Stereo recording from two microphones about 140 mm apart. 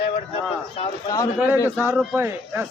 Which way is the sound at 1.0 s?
25° left (ahead or behind).